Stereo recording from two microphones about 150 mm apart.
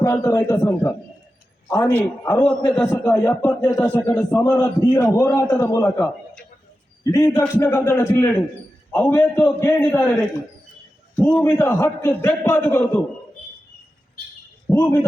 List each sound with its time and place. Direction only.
0.0 s a man's voice: 20° left (ahead or behind)
1.7 s a man's voice: 15° left (ahead or behind)
14.7 s a sound: 15° left (ahead or behind)